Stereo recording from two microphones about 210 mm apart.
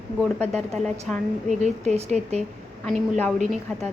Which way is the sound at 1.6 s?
30° right (ahead or behind).